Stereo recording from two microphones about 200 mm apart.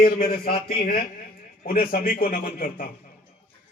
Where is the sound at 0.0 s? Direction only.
45° left (ahead or behind).